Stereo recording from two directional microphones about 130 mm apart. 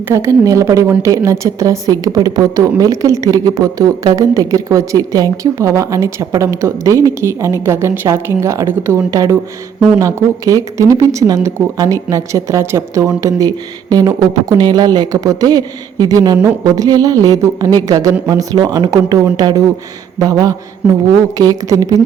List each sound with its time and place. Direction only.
0.1 s a woman's voice: 20° right (ahead or behind)